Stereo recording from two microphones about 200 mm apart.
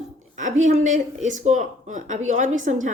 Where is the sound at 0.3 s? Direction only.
35° right (ahead or behind).